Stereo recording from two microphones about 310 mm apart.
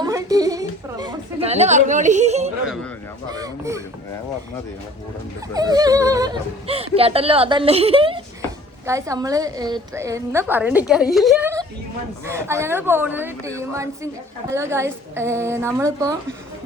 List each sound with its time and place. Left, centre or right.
0.0 s a sound: centre
3.3 s a woman's voice: centre
5.7 s a woman's voice: centre